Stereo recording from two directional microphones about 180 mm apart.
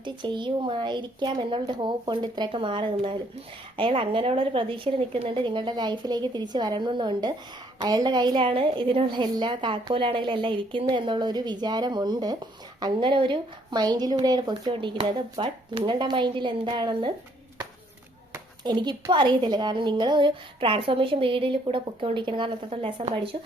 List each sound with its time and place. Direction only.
0.0 s a woman's voice: 25° right (ahead or behind)
18.3 s a woman's voice: 25° right (ahead or behind)